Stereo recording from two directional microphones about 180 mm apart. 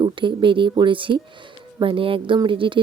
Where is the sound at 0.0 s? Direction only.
25° right (ahead or behind).